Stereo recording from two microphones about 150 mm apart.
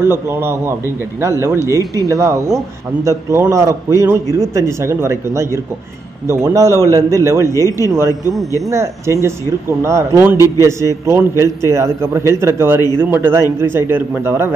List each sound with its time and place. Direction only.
0.0 s a man's voice: 15° right (ahead or behind)
8.1 s a man's voice: 25° left (ahead or behind)
8.6 s a man's voice: 20° right (ahead or behind)